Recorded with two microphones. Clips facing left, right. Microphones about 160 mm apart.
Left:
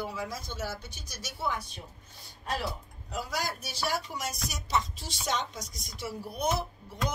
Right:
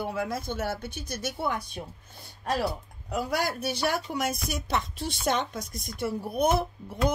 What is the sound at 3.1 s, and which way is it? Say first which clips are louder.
Speech: right 6 dB; 60° right (ahead or behind).